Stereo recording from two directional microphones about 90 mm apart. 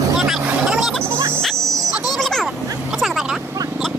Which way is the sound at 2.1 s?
5° left (ahead or behind).